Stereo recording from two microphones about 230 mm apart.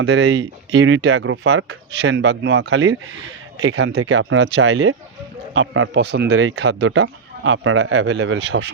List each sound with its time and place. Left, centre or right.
0.0 s a man's voice: right